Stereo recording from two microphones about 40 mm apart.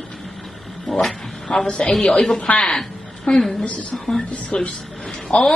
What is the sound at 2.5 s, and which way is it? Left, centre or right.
Speech, left.